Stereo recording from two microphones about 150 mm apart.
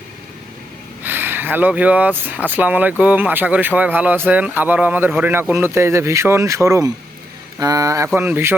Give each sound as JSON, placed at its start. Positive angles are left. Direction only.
{"t": 1.0, "sound": "speech", "side_deg": -15}